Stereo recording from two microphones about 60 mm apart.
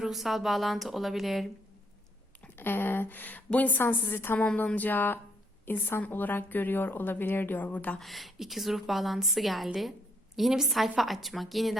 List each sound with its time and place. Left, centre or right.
0.0 s a woman's voice: centre
2.6 s a woman's voice: left
4.4 s music: left
5.6 s a woman's voice: left
7.9 s a woman's voice: centre